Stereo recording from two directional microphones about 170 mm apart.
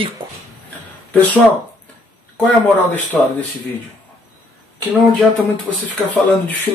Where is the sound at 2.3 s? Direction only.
10° left (ahead or behind).